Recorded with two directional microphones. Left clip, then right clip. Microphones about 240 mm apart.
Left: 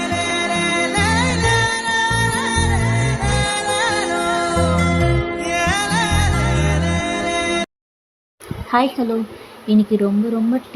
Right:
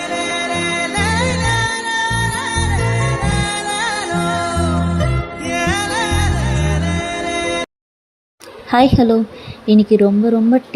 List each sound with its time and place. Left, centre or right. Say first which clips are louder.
0.0 s music: even; centre
8.7 s a woman's voice: right 5 dB; centre